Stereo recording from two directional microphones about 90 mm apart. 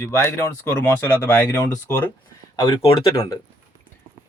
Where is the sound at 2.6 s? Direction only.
65° left (ahead or behind).